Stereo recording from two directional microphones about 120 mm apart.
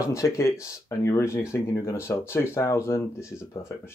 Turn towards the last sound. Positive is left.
turn(degrees=25)  # may be behind; listen again after turning